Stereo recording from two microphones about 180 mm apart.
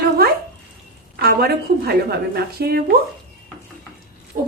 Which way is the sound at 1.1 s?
60° right (ahead or behind).